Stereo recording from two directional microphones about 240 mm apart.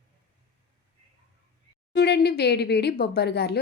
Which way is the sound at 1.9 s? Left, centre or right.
Left.